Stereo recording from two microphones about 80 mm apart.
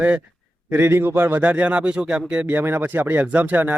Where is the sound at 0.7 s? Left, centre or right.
Right; by 2.4 s centre.